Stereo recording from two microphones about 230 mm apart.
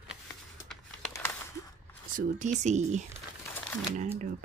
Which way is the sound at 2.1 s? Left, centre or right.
Right.